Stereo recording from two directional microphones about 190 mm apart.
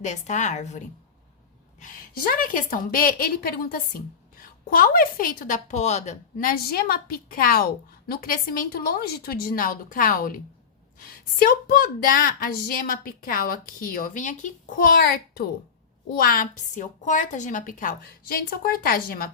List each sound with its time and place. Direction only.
0.0 s a woman's voice: 40° left (ahead or behind)